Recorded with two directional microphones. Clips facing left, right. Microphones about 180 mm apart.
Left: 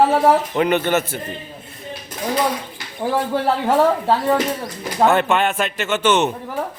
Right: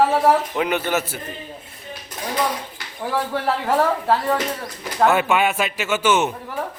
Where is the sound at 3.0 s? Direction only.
25° left (ahead or behind).